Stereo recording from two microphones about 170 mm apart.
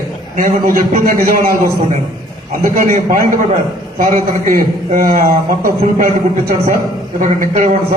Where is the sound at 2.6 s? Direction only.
55° right (ahead or behind).